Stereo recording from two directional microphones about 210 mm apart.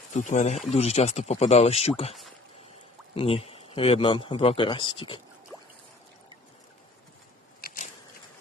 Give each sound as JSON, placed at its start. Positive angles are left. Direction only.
{"t": 0.1, "sound": "speech", "side_deg": 35}
{"t": 3.2, "sound": "speech", "side_deg": 25}